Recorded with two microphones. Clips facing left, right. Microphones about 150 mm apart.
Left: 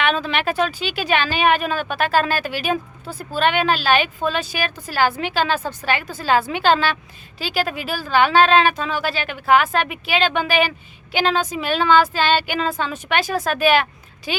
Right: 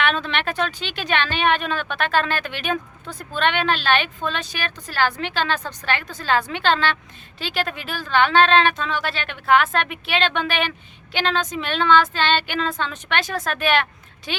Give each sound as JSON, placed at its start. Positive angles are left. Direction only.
{"t": 0.0, "sound": "speech", "side_deg": 5}